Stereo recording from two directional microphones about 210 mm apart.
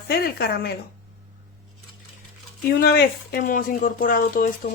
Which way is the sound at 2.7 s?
45° left (ahead or behind).